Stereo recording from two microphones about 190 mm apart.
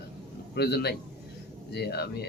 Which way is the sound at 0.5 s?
60° left (ahead or behind).